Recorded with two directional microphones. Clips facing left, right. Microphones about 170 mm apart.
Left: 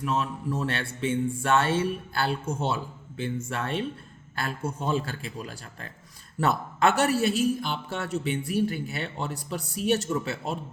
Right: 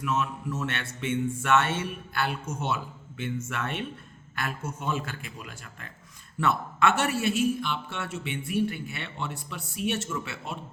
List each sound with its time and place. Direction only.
0.0 s a man's voice: 30° left (ahead or behind)